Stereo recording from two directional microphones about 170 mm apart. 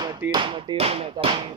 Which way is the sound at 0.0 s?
25° right (ahead or behind).